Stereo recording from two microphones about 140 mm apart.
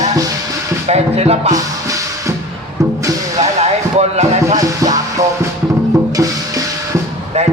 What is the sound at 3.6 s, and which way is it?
Basketball bounce, 50° right (ahead or behind).